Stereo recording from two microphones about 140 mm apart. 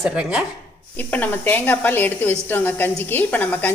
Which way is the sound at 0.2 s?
10° right (ahead or behind).